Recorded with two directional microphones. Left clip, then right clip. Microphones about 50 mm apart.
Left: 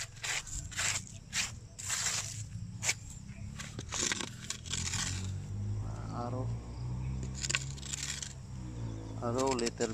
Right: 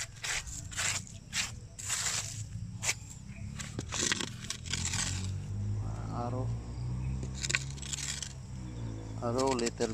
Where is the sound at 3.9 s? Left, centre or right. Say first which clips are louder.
Right 2 dB; centre.